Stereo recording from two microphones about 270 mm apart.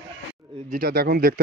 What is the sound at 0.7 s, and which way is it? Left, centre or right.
Speech, right.